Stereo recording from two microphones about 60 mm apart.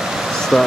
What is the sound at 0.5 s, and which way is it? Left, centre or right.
Speech, centre.